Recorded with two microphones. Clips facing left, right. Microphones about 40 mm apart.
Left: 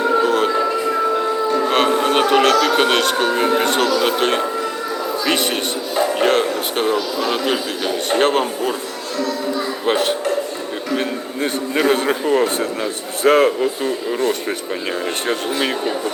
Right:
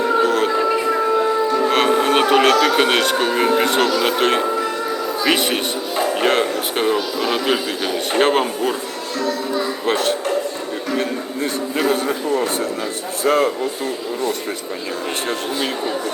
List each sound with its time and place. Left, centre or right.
0.2 s a sound: centre
0.9 s music: centre
3.5 s speech: centre
9.8 s speech: centre
11.9 s a man's voice: left
15.3 s speech: left